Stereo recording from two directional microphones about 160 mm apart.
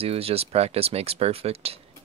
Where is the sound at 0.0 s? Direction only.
40° right (ahead or behind).